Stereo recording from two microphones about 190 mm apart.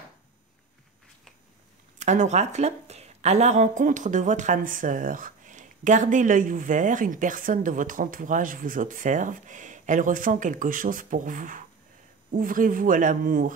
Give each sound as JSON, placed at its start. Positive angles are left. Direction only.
{"t": 2.0, "sound": "a woman's voice", "side_deg": -40}